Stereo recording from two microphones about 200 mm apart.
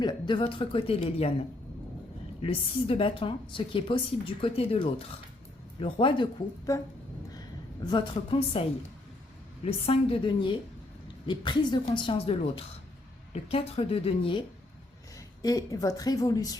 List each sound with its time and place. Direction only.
0.0 s speech: 20° left (ahead or behind)
2.4 s a woman's voice: 30° left (ahead or behind)
7.9 s a woman's voice: 25° left (ahead or behind)
9.6 s a woman's voice: 30° left (ahead or behind)